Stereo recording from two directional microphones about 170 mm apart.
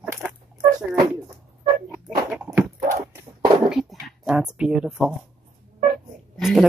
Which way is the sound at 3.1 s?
20° right (ahead or behind).